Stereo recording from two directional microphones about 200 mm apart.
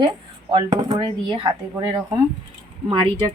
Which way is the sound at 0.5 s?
20° right (ahead or behind).